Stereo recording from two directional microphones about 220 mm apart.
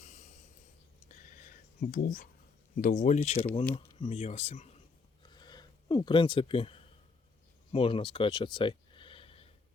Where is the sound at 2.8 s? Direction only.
35° left (ahead or behind).